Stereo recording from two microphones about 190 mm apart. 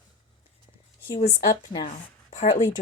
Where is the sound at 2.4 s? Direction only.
40° left (ahead or behind).